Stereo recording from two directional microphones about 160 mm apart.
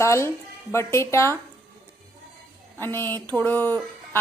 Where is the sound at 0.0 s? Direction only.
15° left (ahead or behind).